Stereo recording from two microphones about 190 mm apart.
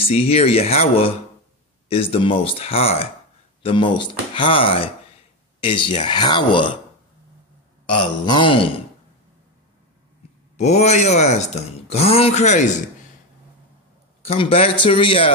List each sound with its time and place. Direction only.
0.0 s speech: 30° left (ahead or behind)
7.9 s speech: 25° left (ahead or behind)
10.6 s speech: 35° left (ahead or behind)
14.2 s speech: 30° left (ahead or behind)